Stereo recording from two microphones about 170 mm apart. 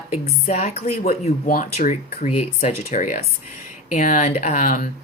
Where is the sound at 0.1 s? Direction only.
40° left (ahead or behind).